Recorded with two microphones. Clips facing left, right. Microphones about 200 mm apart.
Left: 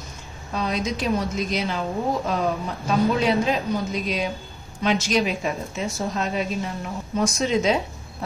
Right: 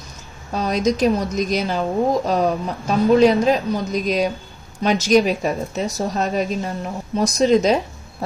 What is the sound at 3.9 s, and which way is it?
A woman's voice, 40° right (ahead or behind).